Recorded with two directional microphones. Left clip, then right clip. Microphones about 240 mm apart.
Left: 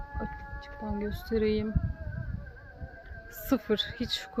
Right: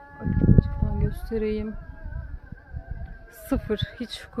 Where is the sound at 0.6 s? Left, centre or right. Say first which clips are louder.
Right 2 dB; left.